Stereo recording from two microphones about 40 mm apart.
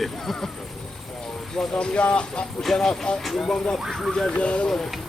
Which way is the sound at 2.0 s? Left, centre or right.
Left.